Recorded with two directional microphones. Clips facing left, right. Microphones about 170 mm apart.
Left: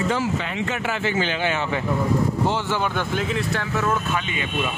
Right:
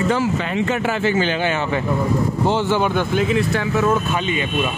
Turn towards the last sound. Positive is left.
turn(degrees=-30)  # may be behind; listen again after turning